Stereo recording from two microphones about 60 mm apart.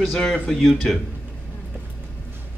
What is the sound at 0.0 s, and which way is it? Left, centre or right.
Speech, centre.